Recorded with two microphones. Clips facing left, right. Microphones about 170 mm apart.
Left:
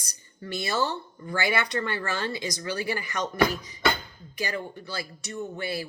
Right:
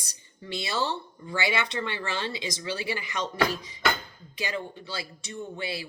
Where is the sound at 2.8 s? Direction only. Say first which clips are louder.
Left 5 dB; 45° left (ahead or behind).